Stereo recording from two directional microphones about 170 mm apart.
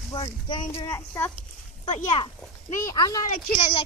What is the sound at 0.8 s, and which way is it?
Speech, 15° left (ahead or behind).